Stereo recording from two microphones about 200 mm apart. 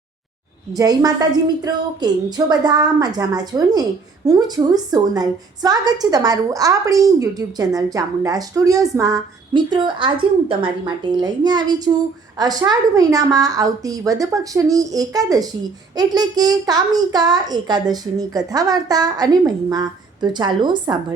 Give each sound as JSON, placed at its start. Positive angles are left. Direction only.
{"t": 0.8, "sound": "a child's voice", "side_deg": -20}